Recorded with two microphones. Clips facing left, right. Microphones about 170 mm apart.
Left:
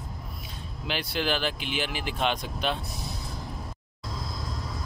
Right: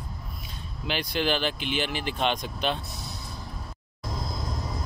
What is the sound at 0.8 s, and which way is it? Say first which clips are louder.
Speech: right 2 dB; 5° left (ahead or behind).